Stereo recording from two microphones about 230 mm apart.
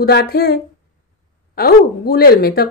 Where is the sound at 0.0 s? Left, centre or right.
Left.